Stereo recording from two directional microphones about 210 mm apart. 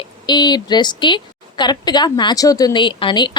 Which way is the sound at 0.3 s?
20° left (ahead or behind).